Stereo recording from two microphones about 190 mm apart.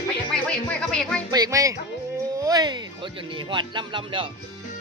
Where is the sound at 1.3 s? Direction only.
20° right (ahead or behind).